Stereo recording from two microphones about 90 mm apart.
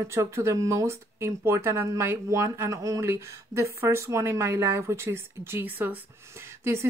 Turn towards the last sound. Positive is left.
turn(degrees=-25)  # may be behind; listen again after turning